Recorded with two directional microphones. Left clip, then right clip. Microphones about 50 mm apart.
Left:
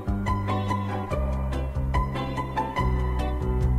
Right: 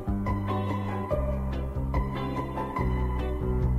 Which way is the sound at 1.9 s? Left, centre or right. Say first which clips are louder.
Left 4 dB; left.